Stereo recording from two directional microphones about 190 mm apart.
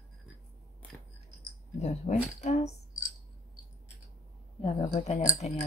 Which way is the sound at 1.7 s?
35° left (ahead or behind).